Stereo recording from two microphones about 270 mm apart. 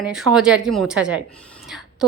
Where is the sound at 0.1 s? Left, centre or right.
Centre.